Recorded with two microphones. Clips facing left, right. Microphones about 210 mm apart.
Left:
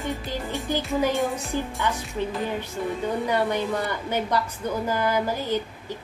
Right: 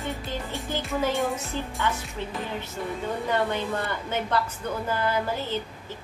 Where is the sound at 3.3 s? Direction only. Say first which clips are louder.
Left 1 dB; 15° left (ahead or behind).